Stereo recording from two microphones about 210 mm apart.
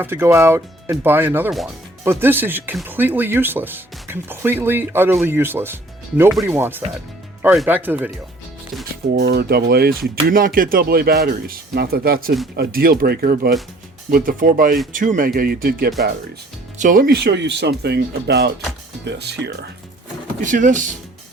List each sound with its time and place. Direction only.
0.0 s speech: 10° right (ahead or behind)
9.1 s speech: 50° right (ahead or behind)
20.4 s speech: 35° right (ahead or behind)